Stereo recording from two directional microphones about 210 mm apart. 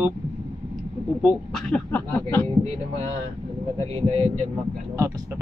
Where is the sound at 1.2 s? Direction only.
5° left (ahead or behind).